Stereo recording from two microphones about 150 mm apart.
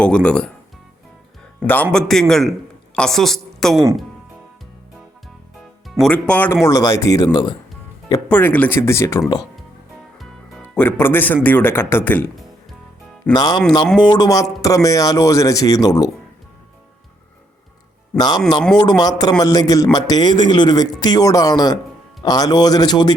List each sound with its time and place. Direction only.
0.0 s speech: 5° left (ahead or behind)
1.6 s a man's voice: 10° left (ahead or behind)
5.9 s speech: 5° left (ahead or behind); by 9.2 s 20° left (ahead or behind)
10.2 s music: centre (ahead or behind)
10.8 s speech: 15° left (ahead or behind)
13.3 s speech: 30° left (ahead or behind)
18.2 s speech: 25° left (ahead or behind)